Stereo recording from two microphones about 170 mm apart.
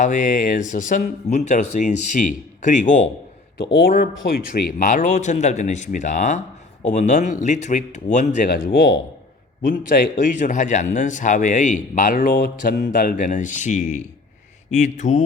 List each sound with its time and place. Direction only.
0.0 s speech: 50° left (ahead or behind)
3.6 s speech: 80° left
4.9 s speech: 45° left (ahead or behind)
8.4 s speech: 65° left (ahead or behind)
9.6 s speech: 55° left (ahead or behind)